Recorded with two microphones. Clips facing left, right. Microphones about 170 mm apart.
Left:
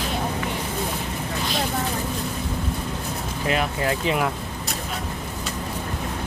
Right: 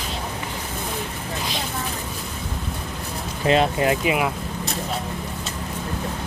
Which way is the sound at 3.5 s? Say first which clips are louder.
Right 5 dB; 25° right (ahead or behind).